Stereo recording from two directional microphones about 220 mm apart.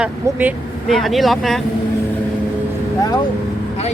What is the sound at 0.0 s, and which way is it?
Speech, 5° right (ahead or behind).